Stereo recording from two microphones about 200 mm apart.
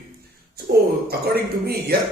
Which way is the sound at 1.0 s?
50° right (ahead or behind).